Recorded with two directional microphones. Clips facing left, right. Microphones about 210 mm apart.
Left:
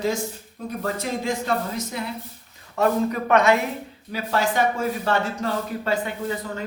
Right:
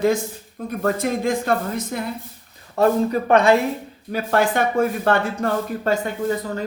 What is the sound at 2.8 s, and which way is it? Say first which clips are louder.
Speech: right 3 dB; 30° right (ahead or behind).